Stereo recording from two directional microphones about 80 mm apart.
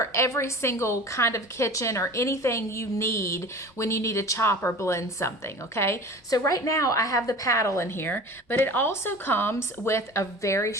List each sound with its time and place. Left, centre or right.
0.0 s a woman's voice: left
6.5 s a woman's voice: left